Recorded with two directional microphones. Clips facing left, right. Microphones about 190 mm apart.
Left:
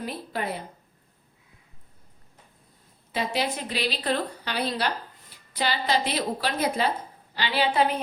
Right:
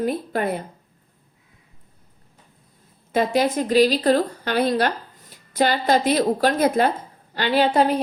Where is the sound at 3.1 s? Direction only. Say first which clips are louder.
Right 8 dB; 45° right (ahead or behind).